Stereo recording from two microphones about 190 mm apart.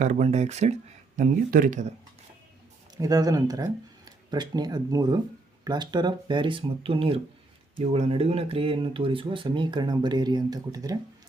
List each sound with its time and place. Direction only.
0.0 s speech: 40° right (ahead or behind)
3.0 s speech: 20° right (ahead or behind)